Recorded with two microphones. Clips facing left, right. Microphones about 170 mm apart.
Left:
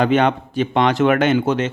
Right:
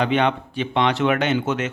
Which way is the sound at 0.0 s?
45° left (ahead or behind).